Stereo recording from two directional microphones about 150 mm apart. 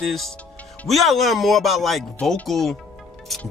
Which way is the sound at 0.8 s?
Centre (ahead or behind).